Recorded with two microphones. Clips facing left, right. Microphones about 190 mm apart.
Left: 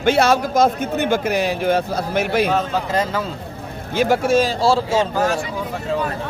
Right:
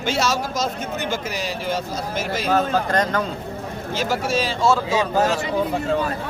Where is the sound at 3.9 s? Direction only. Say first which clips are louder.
Left 7 dB; 55° left (ahead or behind); by 5.1 s 30° left (ahead or behind).